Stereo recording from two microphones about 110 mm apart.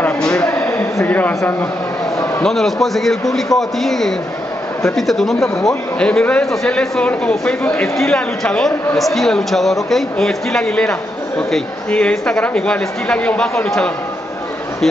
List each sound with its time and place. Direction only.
0.0 s a sound: 10° left (ahead or behind)
1.0 s speech: 15° left (ahead or behind)
2.4 s a man's voice: 5° left (ahead or behind)